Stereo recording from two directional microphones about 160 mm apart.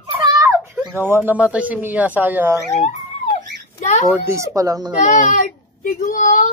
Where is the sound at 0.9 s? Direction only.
15° right (ahead or behind).